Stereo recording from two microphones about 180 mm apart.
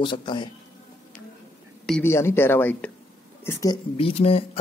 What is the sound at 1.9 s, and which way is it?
A man's voice, 15° left (ahead or behind).